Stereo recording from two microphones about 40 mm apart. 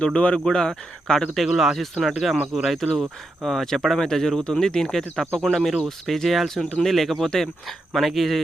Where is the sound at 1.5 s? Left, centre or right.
Centre.